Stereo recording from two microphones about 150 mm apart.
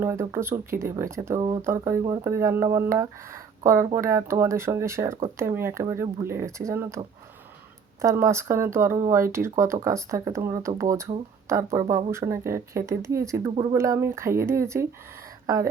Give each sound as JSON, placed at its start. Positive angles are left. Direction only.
{"t": 0.0, "sound": "speech", "side_deg": -20}
{"t": 8.0, "sound": "speech", "side_deg": -20}